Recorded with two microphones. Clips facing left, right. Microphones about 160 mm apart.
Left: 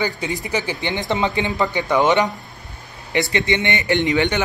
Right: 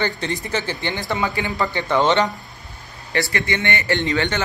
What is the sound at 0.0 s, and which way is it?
Speech, 5° left (ahead or behind).